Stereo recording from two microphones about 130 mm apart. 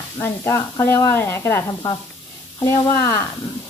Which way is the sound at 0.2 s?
20° left (ahead or behind).